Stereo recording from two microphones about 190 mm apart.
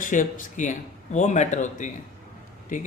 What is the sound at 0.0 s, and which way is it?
Speech, 45° left (ahead or behind).